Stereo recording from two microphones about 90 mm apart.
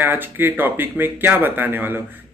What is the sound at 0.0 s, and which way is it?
Speech, 20° right (ahead or behind).